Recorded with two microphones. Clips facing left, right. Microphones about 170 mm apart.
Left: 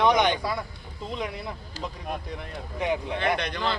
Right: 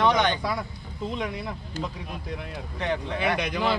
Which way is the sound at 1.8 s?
50° right (ahead or behind).